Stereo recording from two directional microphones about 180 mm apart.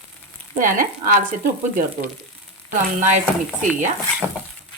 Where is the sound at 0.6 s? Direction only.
50° right (ahead or behind).